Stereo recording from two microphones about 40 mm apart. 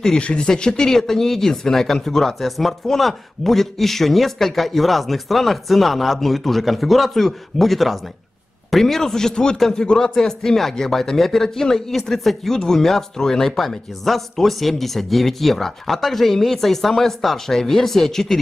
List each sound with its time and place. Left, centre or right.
0.2 s speech: left; by 18.4 s centre